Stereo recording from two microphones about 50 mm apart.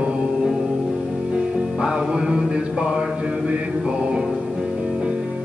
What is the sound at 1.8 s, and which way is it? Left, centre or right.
Music, centre.